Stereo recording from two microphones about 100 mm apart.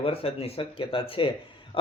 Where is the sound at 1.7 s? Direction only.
65° left (ahead or behind).